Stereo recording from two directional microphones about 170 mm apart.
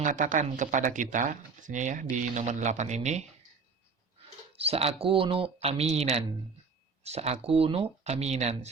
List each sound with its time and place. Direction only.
0.0 s speech: 50° right (ahead or behind)
4.5 s speech: 35° right (ahead or behind)